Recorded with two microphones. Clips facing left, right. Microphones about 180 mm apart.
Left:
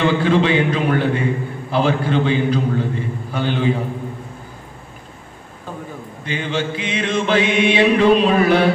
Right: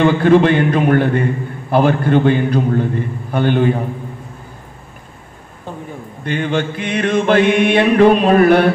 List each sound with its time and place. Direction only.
0.0 s a man's voice: 55° right (ahead or behind)
6.2 s mantra: 55° right (ahead or behind)